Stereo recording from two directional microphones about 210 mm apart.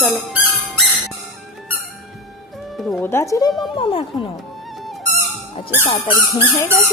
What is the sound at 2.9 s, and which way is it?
A woman's voice, 10° left (ahead or behind).